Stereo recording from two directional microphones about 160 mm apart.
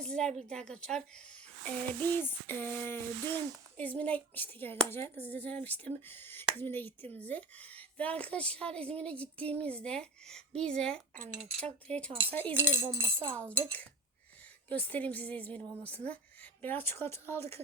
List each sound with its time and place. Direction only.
0.0 s a woman's voice: 5° left (ahead or behind)
11.1 s speech: 55° right (ahead or behind)
11.9 s a woman's voice: 5° left (ahead or behind)
12.5 s speech: 15° right (ahead or behind)
13.3 s a woman's voice: 10° left (ahead or behind)